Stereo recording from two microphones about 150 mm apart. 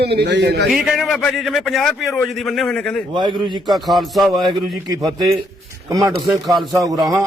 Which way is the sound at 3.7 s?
Centre (ahead or behind).